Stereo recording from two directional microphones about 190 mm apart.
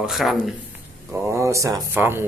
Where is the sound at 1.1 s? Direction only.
15° right (ahead or behind).